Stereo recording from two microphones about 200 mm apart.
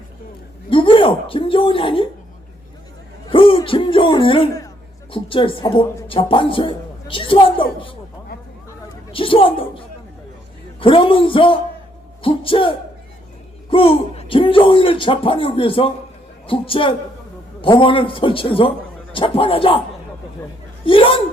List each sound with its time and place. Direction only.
0.7 s speech: 25° left (ahead or behind)
3.2 s a man's voice: 25° left (ahead or behind)
9.1 s speech: 25° left (ahead or behind)
20.8 s speech: 25° left (ahead or behind)